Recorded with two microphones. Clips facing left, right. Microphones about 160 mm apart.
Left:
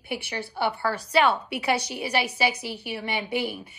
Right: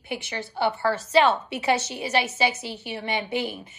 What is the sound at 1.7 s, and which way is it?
Speech, 10° left (ahead or behind).